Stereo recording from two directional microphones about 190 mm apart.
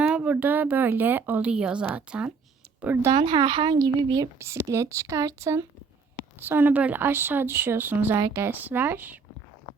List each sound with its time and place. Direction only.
0.1 s speech: 5° right (ahead or behind)
3.1 s speech: 30° right (ahead or behind); by 9.2 s 10° right (ahead or behind)